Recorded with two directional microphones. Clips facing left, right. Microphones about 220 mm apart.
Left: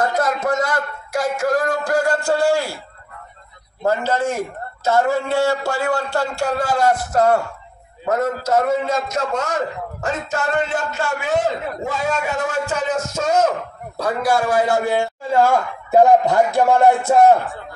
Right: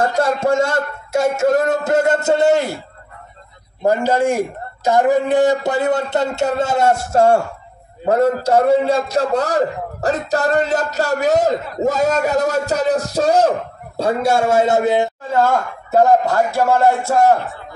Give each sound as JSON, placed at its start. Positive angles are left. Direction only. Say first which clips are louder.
{"t": 0.0, "sound": "a man's voice", "louder": "right 3 dB", "side_deg": -30}
{"t": 3.8, "sound": "a man's voice", "louder": "right 4 dB", "side_deg": -15}
{"t": 15.3, "sound": "speech", "louder": "left 1 dB", "side_deg": 10}